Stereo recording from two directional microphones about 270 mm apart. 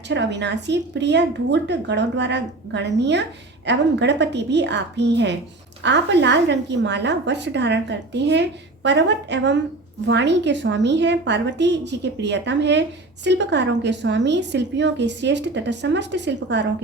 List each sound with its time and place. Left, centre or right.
0.1 s a woman's voice: right